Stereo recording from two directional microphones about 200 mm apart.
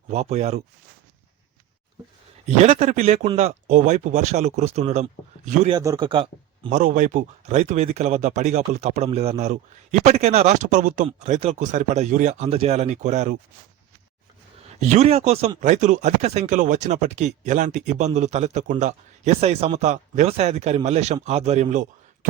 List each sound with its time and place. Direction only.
0.1 s speech: 35° right (ahead or behind)
2.6 s speech: 30° right (ahead or behind)
6.7 s speech: 40° right (ahead or behind)
14.8 s speech: 35° right (ahead or behind)